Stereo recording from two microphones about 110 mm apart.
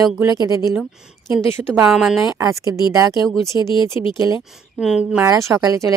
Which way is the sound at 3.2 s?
Centre (ahead or behind).